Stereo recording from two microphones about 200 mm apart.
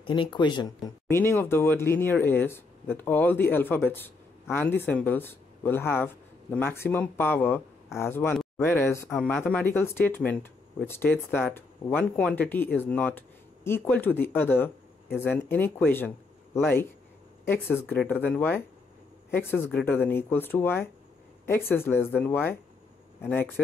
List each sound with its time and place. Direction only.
0.0 s speech: 25° left (ahead or behind)
1.0 s speech: 10° left (ahead or behind)